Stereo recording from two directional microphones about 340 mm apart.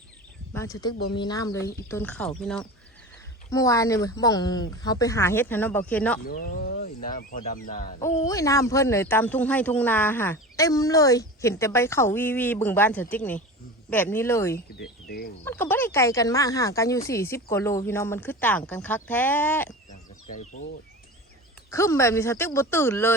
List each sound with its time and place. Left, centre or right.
0.5 s speech: centre
6.2 s speech: left
7.9 s speech: centre
15.0 s a sound: left
15.4 s speech: centre
21.7 s speech: centre